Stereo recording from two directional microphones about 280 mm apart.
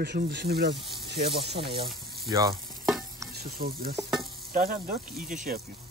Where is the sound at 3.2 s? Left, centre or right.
Centre.